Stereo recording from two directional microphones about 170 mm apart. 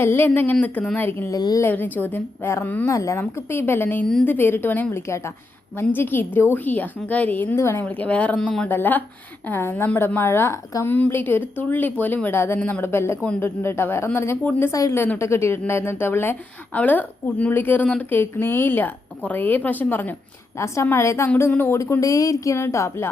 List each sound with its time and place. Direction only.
0.0 s a woman's voice: 15° left (ahead or behind)